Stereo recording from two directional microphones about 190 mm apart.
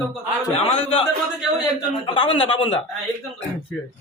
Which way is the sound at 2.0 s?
25° left (ahead or behind).